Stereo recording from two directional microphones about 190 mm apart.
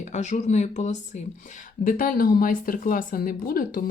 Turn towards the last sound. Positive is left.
turn(degrees=50)  # may be behind; listen again after turning